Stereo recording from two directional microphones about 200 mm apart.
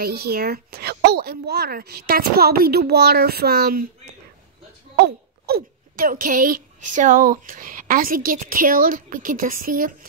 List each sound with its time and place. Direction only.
0.0 s speech: 50° right (ahead or behind)
4.9 s speech: 50° right (ahead or behind)